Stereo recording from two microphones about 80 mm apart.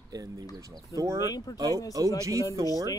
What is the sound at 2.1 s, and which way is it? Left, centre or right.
Speech, right.